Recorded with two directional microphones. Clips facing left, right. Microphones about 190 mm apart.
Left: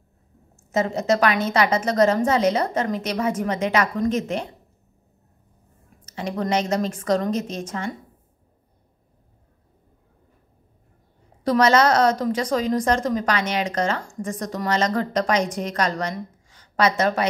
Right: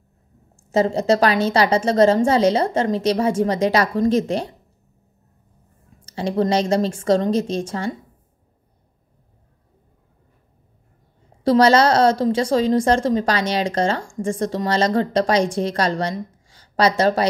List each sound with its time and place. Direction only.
0.6 s a woman's voice: 30° right (ahead or behind)
6.0 s a woman's voice: 30° right (ahead or behind)
11.4 s a woman's voice: 30° right (ahead or behind)